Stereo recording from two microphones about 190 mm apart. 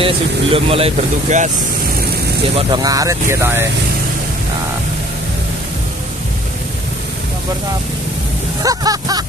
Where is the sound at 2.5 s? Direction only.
20° right (ahead or behind).